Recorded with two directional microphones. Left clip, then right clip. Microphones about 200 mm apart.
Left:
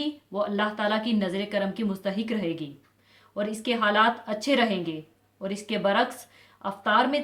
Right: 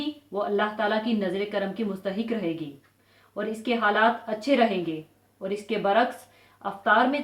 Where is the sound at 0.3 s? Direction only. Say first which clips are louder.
Right 2 dB; 45° left (ahead or behind).